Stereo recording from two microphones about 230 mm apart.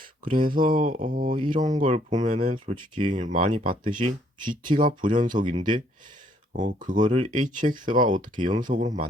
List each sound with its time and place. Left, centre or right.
0.3 s speech: right
8.4 s speech: centre
8.6 s speech: right